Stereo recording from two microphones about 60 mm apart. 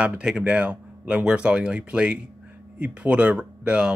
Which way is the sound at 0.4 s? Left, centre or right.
Right.